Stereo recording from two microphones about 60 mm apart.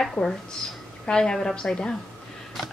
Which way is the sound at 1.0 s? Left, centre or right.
Centre.